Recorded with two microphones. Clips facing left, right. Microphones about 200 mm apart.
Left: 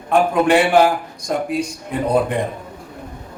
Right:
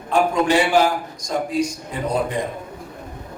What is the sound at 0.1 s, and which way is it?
A man's voice, 55° left (ahead or behind).